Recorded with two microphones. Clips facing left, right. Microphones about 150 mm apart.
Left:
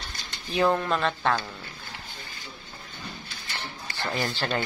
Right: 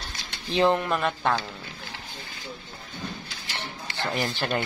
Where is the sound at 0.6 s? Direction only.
20° right (ahead or behind).